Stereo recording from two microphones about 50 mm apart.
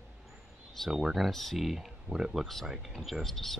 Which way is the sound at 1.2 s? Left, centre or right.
Centre.